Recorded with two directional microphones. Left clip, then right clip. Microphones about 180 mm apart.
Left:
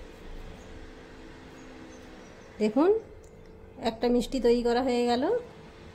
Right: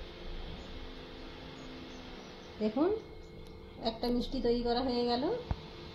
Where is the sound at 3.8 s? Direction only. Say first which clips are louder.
Left 7 dB; 65° left (ahead or behind).